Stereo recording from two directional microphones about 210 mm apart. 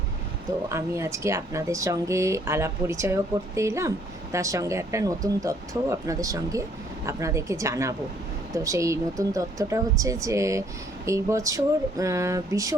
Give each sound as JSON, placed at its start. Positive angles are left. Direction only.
{"t": 0.7, "sound": "speech", "side_deg": -15}